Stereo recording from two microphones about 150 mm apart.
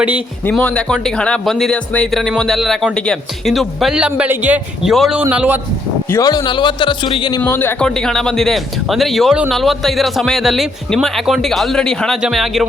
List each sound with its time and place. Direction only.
0.5 s a man's voice: 5° left (ahead or behind); by 5.5 s 10° right (ahead or behind)
6.1 s a man's voice: 25° left (ahead or behind)
7.4 s speech: 15° left (ahead or behind)
7.9 s speech: 5° left (ahead or behind)